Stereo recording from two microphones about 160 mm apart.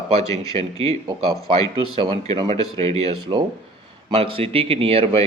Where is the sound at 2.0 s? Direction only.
30° right (ahead or behind).